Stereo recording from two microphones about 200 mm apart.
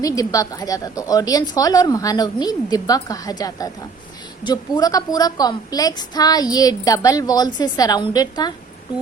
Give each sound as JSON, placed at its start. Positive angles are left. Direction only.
{"t": 0.0, "sound": "a woman's voice", "side_deg": 15}